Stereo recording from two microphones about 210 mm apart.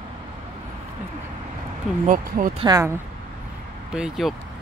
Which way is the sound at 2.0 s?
40° right (ahead or behind).